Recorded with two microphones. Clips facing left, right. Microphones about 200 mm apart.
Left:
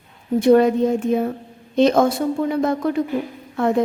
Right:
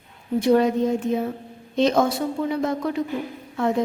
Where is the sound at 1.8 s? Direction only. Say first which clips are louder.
Left 4 dB; 55° left (ahead or behind).